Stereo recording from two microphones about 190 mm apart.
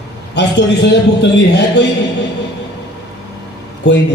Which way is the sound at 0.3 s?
65° left (ahead or behind).